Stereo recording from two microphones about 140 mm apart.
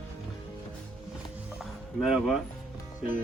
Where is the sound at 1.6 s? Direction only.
Centre (ahead or behind).